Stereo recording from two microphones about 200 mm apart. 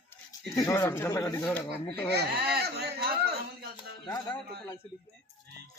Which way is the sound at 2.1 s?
55° right (ahead or behind).